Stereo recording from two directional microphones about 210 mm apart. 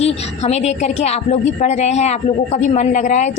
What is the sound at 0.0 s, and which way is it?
Speech, 30° left (ahead or behind).